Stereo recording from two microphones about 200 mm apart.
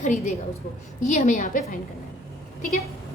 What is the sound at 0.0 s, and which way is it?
A woman's voice, 40° left (ahead or behind).